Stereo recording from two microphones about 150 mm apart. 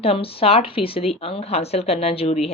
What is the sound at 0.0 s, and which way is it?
A woman's voice, 40° left (ahead or behind).